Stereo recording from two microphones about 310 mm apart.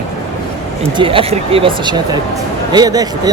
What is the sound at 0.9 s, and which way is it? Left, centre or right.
Speech, centre.